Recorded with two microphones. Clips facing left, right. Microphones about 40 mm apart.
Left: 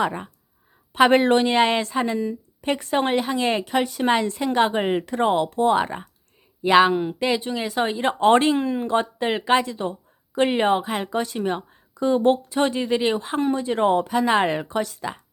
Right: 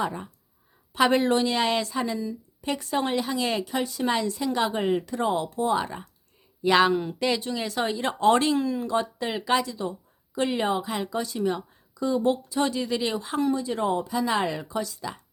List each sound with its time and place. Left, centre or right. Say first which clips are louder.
0.0 s speech: left 5 dB; left
0.9 s speech: left 5 dB; left
6.6 s speech: left 4 dB; left